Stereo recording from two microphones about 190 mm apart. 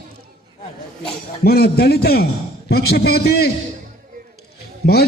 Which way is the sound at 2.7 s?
55° left (ahead or behind).